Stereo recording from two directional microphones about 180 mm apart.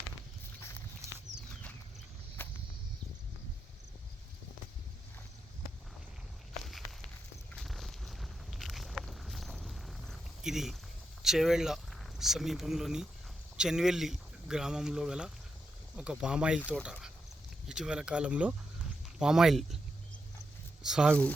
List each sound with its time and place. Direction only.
6.7 s a sound: centre (ahead or behind)
11.2 s speech: centre (ahead or behind)
16.6 s speech: 10° left (ahead or behind)
16.8 s speech: 5° right (ahead or behind)
20.8 s speech: 5° right (ahead or behind)